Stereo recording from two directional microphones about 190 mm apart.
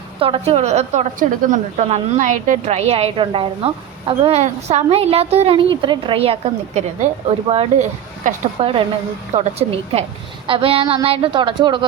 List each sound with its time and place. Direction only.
0.2 s a woman's voice: 30° right (ahead or behind)